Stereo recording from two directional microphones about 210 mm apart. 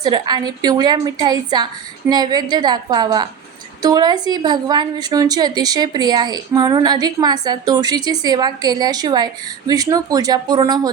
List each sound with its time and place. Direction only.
0.0 s a woman's voice: 20° right (ahead or behind)